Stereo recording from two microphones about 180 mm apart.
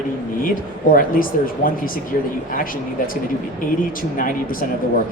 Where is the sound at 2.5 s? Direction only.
50° left (ahead or behind).